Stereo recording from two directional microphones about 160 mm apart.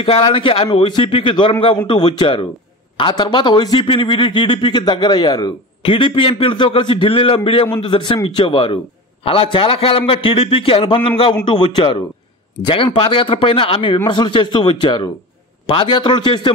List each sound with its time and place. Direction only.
0.0 s speech: 35° left (ahead or behind)